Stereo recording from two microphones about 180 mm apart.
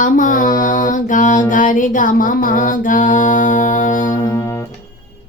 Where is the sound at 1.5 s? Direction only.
45° left (ahead or behind).